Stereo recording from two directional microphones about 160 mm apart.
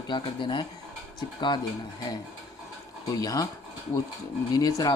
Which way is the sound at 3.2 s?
25° left (ahead or behind).